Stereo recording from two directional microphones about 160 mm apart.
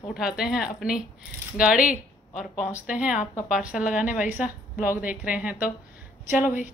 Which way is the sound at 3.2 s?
50° left (ahead or behind).